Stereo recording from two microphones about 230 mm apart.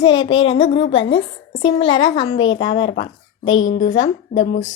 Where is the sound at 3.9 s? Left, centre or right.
Centre.